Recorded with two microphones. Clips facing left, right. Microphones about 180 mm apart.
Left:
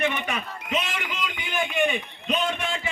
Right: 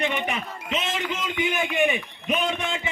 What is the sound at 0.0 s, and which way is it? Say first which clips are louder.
Speech: even; 20° right (ahead or behind).